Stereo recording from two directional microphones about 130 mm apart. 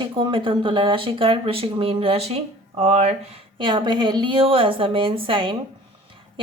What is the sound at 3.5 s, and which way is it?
A woman's voice, 35° right (ahead or behind).